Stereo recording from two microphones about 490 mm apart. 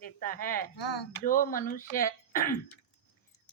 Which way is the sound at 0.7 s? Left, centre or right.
Left.